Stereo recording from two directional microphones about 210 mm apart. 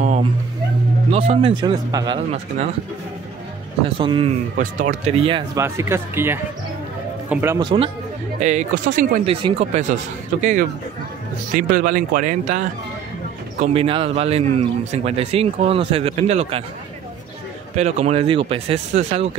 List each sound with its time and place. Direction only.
0.0 s a sound: 35° right (ahead or behind)
1.1 s a man's voice: 30° right (ahead or behind)
4.0 s a man's voice: 25° right (ahead or behind)
4.6 s a man's voice: 40° right (ahead or behind)
5.5 s speech: 15° right (ahead or behind)
7.5 s a man's voice: 20° right (ahead or behind)
8.4 s speech: 35° right (ahead or behind)
13.6 s a man's voice: 25° right (ahead or behind)
17.7 s a man's voice: 30° right (ahead or behind)